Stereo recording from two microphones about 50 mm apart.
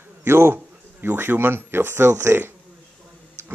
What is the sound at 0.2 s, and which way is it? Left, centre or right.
Speech, right.